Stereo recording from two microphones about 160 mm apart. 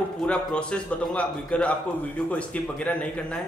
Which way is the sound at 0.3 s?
5° left (ahead or behind).